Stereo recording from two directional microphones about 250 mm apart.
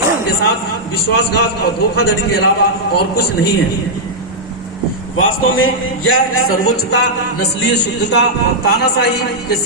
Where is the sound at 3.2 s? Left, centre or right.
Left.